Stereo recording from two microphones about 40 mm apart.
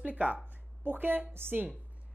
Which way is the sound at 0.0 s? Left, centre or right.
Right.